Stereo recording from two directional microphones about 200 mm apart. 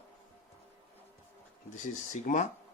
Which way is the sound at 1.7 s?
35° left (ahead or behind).